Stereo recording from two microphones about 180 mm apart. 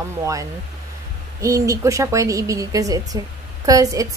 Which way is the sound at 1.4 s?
15° right (ahead or behind).